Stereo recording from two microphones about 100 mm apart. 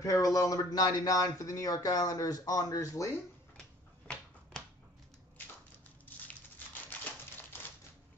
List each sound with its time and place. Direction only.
0.0 s speech: 35° left (ahead or behind)
6.0 s crumpling: 20° left (ahead or behind)